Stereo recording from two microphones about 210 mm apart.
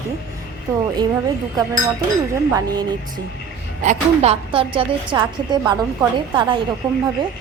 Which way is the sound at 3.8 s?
30° right (ahead or behind).